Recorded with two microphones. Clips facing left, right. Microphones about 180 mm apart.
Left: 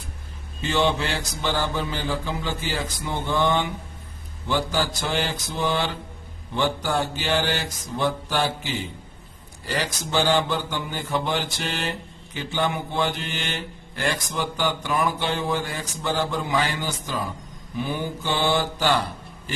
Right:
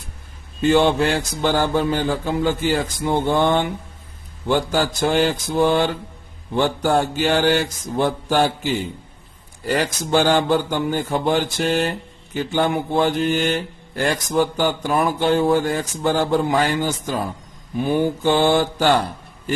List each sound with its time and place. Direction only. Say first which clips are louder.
0.6 s a man's voice: right 7 dB; 50° right (ahead or behind)